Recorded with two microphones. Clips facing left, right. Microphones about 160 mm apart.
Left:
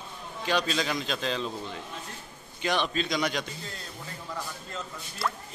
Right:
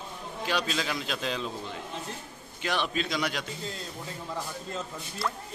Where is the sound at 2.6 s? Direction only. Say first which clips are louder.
Left 2 dB; 5° right (ahead or behind).